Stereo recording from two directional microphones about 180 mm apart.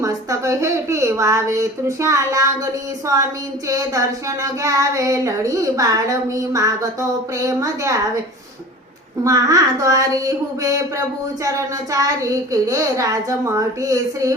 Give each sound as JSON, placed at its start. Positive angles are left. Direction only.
{"t": 0.0, "sound": "a woman's voice", "side_deg": -20}
{"t": 9.2, "sound": "a woman's voice", "side_deg": -20}